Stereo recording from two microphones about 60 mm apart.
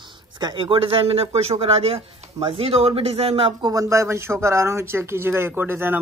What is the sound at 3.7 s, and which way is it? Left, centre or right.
Speech, right.